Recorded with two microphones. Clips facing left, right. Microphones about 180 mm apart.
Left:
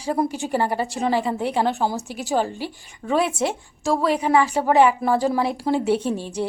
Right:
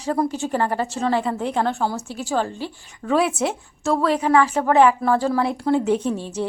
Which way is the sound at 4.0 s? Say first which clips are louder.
Right 1 dB; 10° left (ahead or behind).